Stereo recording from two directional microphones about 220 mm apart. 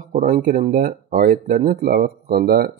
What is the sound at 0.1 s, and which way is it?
Speech, 35° right (ahead or behind).